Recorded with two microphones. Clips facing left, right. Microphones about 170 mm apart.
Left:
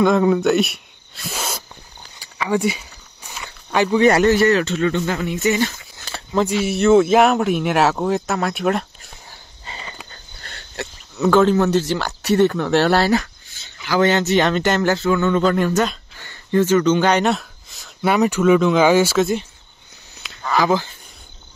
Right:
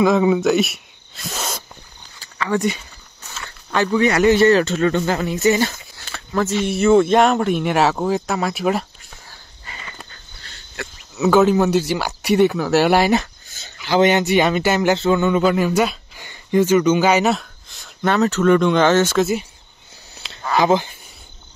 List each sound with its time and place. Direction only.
0.0 s a man's voice: 5° right (ahead or behind)
1.2 s a sound: 10° left (ahead or behind)
4.3 s speech: 30° right (ahead or behind)
6.3 s a man's voice: 10° left (ahead or behind)
9.7 s a sound: 25° left (ahead or behind)
10.4 s a sound: 55° left (ahead or behind)
11.1 s speech: 10° right (ahead or behind)
15.0 s speech: 25° right (ahead or behind)
15.2 s speech: 10° right (ahead or behind)
18.1 s speech: 10° left (ahead or behind)
20.5 s speech: 20° right (ahead or behind)